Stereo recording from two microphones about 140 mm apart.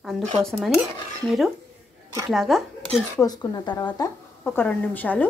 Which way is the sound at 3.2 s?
30° left (ahead or behind).